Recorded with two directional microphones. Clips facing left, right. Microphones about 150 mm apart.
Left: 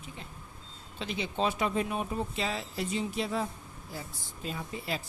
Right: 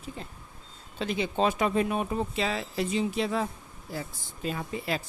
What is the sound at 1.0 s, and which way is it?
Speech, 50° right (ahead or behind).